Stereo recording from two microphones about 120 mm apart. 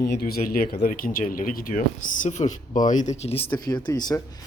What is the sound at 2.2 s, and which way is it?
Speech, 85° left.